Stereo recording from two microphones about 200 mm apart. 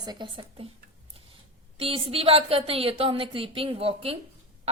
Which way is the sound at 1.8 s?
30° right (ahead or behind).